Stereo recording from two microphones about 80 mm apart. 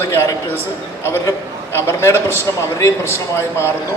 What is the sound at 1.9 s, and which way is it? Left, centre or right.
A man's voice, left.